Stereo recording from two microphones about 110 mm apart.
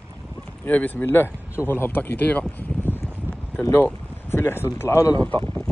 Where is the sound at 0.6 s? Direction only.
15° left (ahead or behind).